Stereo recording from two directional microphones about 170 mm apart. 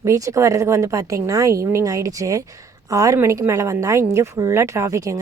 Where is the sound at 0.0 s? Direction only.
20° right (ahead or behind).